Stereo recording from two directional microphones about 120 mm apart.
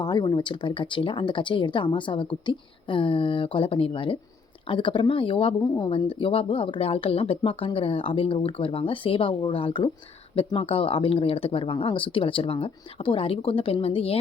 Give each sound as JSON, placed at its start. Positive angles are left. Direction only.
{"t": 0.0, "sound": "speech", "side_deg": 35}